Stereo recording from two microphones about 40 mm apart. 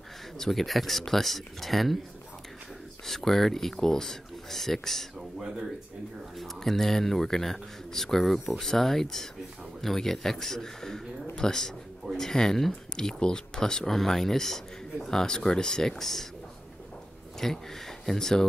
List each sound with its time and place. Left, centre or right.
0.4 s speech: centre
3.1 s speech: centre
6.3 s speech: centre
12.9 s speech: centre
13.8 s speech: centre
17.4 s speech: centre